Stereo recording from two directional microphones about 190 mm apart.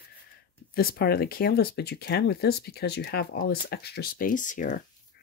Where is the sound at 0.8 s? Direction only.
55° left (ahead or behind).